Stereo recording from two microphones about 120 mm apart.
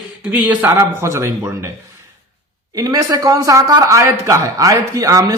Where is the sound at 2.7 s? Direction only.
30° right (ahead or behind).